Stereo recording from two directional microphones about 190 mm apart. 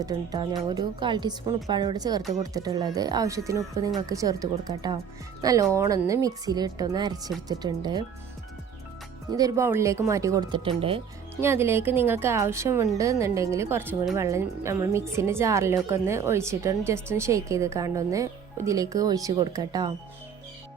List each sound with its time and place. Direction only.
0.0 s a woman's voice: 20° right (ahead or behind)
9.3 s a woman's voice: 20° right (ahead or behind)
11.3 s a woman's voice: 15° right (ahead or behind)